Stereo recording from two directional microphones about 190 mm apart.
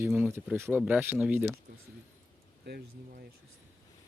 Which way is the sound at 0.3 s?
15° right (ahead or behind).